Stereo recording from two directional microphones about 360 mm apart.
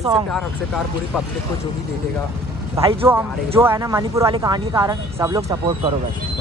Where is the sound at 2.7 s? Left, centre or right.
Centre.